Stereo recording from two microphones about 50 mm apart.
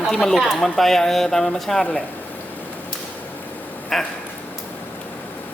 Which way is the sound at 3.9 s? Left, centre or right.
Centre.